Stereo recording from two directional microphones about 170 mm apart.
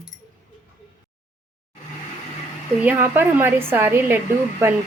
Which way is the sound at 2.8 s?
10° right (ahead or behind).